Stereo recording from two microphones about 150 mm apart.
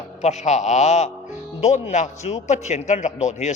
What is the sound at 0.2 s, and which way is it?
A man's voice, 50° left (ahead or behind).